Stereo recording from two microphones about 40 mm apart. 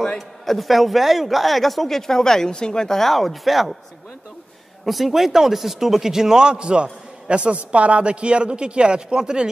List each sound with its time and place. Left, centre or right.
0.5 s speech: centre
4.8 s speech: centre; by 9.5 s right